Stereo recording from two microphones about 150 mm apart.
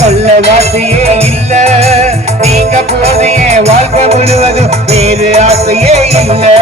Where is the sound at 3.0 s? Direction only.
45° right (ahead or behind).